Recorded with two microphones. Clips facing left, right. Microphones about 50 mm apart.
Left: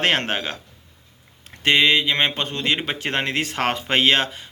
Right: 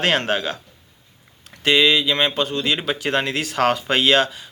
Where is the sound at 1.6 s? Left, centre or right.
Left.